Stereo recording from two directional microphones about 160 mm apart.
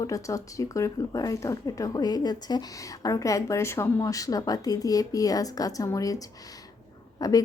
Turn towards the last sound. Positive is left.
turn(degrees=25)  # may be behind; listen again after turning